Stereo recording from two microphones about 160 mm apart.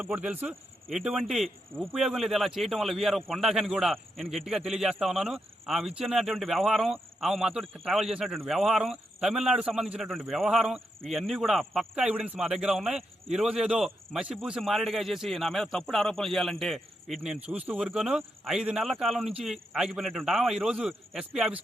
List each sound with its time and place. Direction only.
0.0 s speech: 10° right (ahead or behind)